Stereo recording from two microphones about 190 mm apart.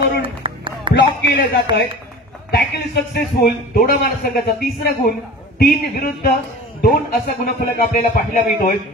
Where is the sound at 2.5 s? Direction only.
60° left (ahead or behind).